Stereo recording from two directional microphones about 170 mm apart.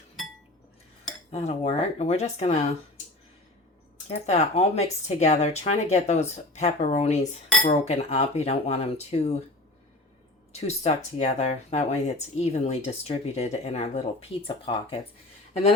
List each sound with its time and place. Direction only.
1.3 s speech: 40° left (ahead or behind)
4.1 s speech: 40° left (ahead or behind)
10.5 s speech: 40° left (ahead or behind)